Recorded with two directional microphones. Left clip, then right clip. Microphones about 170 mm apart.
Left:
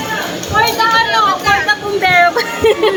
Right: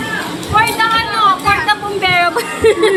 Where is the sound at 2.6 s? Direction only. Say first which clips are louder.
Right 1 dB; 20° right (ahead or behind).